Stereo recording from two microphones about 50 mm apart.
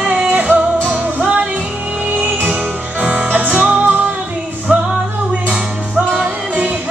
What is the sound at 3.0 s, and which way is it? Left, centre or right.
Music, right.